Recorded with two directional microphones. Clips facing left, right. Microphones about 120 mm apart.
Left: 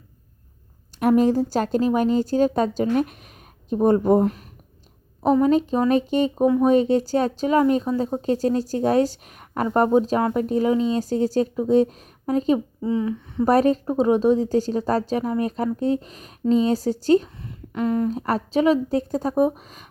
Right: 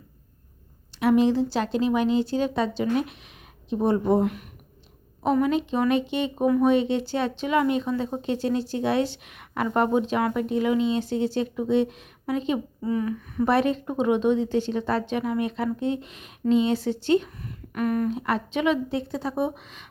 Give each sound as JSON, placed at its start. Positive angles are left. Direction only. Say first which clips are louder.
{"t": 0.9, "sound": "speech", "louder": "left 2 dB", "side_deg": 45}
{"t": 12.8, "sound": "speech", "louder": "left 3 dB", "side_deg": 25}
{"t": 13.4, "sound": "speech", "louder": "left 4 dB", "side_deg": 40}
{"t": 17.7, "sound": "speech", "louder": "left 2 dB", "side_deg": 25}
{"t": 18.1, "sound": "speech", "louder": "left 3 dB", "side_deg": 40}